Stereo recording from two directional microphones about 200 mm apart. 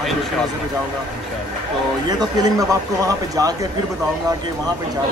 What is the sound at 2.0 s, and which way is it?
Speech, 15° right (ahead or behind).